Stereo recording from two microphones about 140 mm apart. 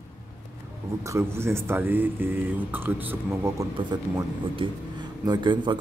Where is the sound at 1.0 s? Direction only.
20° right (ahead or behind).